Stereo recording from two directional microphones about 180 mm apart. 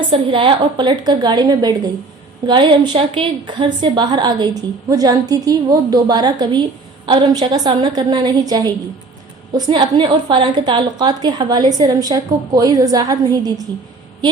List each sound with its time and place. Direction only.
0.1 s a woman's voice: 30° right (ahead or behind)